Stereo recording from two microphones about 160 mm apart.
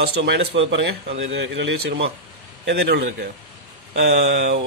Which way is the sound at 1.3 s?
90° right.